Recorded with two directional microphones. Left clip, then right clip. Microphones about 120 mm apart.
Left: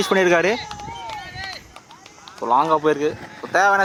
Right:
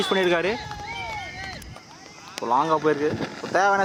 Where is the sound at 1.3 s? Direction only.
40° left (ahead or behind).